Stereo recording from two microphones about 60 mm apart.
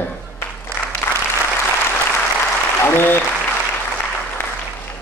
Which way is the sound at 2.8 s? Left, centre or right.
Left.